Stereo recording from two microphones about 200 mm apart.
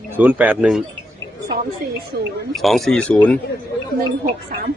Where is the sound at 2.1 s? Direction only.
50° right (ahead or behind).